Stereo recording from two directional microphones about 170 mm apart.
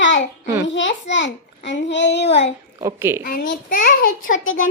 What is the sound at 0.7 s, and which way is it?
A child's voice, 90° left.